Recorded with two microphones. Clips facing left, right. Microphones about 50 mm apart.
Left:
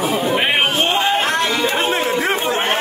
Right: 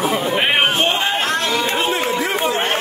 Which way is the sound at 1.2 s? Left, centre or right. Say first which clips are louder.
Left 1 dB; left.